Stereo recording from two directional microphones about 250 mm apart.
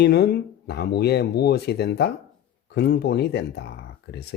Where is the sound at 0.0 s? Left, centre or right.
Left.